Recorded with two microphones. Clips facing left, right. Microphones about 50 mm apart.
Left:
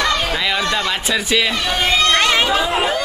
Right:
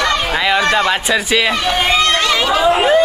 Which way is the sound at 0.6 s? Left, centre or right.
Right.